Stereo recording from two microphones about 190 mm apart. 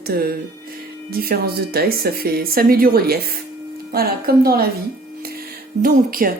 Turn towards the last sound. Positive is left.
turn(degrees=-50)  # may be behind; listen again after turning